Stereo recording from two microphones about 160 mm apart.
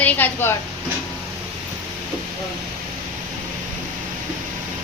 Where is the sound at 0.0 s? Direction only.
10° left (ahead or behind).